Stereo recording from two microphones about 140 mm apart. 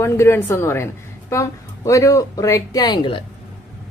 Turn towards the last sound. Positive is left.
turn(degrees=35)  # may be behind; listen again after turning